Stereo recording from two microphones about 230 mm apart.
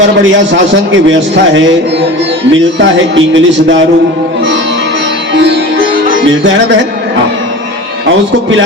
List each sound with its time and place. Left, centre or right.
0.7 s speech: right
5.3 s music: right
6.2 s speech: right